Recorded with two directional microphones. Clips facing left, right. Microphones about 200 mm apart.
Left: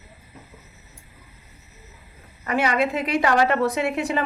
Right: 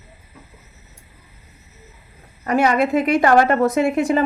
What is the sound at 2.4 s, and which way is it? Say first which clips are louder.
A woman's voice: right 5 dB; 45° right (ahead or behind).